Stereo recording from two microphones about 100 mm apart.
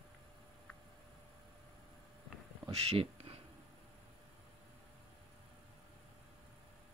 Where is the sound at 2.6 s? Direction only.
75° right (ahead or behind).